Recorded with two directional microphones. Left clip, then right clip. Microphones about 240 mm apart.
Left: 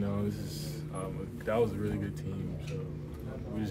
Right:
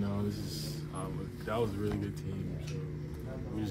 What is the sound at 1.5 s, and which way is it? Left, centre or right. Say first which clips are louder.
Speech: left 5 dB; centre.